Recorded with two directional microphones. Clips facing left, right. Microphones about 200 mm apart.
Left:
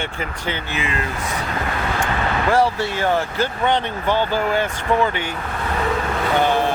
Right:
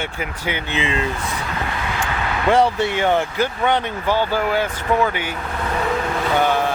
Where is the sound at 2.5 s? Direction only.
20° right (ahead or behind).